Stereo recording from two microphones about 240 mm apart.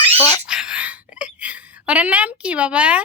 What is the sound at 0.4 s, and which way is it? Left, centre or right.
A woman's voice, centre.